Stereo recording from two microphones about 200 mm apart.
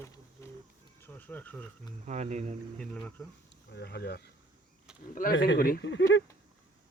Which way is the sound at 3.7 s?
55° left (ahead or behind).